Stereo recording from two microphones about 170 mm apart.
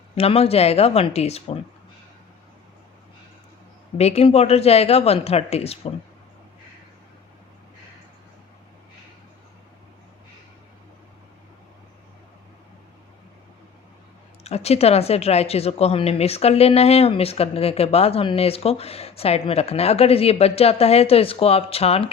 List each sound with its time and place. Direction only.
0.2 s speech: 35° left (ahead or behind)
3.9 s speech: 35° left (ahead or behind)
14.4 s speech: 40° left (ahead or behind)